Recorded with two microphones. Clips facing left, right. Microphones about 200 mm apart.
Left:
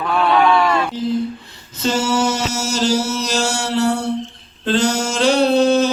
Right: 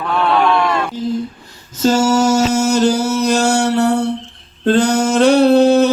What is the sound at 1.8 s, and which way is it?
Mantra, 45° right (ahead or behind).